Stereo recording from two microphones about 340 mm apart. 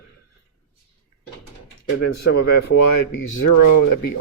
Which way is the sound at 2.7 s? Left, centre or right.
Left.